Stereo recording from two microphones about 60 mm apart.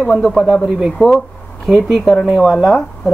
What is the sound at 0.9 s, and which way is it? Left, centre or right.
Speech, centre.